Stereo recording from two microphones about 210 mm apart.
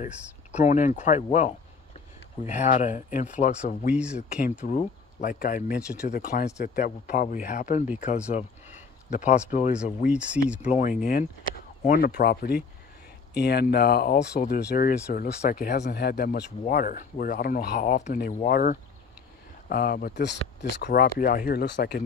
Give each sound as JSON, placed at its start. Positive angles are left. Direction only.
{"t": 0.0, "sound": "speech", "side_deg": 35}
{"t": 3.8, "sound": "speech", "side_deg": -5}
{"t": 4.2, "sound": "speech", "side_deg": 35}
{"t": 10.0, "sound": "speech", "side_deg": -5}
{"t": 10.7, "sound": "speech", "side_deg": 40}
{"t": 16.6, "sound": "speech", "side_deg": 40}